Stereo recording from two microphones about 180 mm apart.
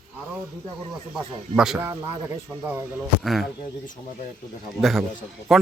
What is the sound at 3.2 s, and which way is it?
Speech, centre (ahead or behind).